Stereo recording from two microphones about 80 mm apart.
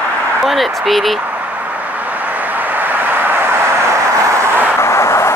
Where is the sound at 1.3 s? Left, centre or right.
Centre; by 4.5 s right.